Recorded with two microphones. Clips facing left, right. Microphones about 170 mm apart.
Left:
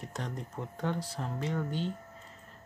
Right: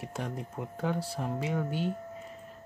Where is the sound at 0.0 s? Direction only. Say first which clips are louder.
Right 3 dB; 10° right (ahead or behind).